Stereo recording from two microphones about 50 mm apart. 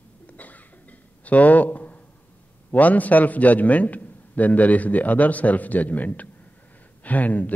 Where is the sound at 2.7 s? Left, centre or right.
Left.